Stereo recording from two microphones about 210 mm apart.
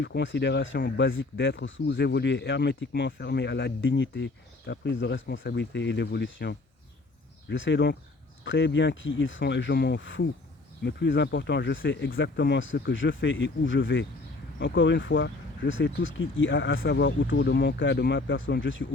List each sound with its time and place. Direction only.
0.0 s speech: 60° left (ahead or behind)